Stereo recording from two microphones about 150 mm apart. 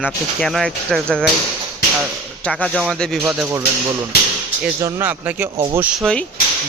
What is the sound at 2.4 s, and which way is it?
Speech, 5° left (ahead or behind).